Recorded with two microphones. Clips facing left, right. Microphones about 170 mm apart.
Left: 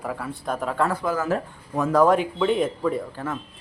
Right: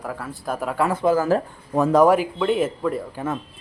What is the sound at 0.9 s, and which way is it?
Speech, 25° right (ahead or behind).